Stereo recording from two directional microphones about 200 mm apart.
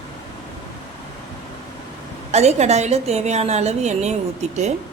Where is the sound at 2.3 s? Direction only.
35° right (ahead or behind).